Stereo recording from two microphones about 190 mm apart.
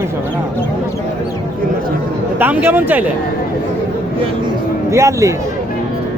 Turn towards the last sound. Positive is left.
turn(degrees=-15)  # may be behind; listen again after turning